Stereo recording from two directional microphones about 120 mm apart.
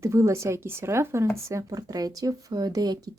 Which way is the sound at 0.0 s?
25° right (ahead or behind).